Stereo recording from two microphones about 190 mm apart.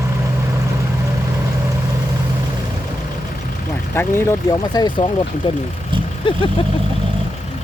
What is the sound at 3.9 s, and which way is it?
Speech, 15° left (ahead or behind).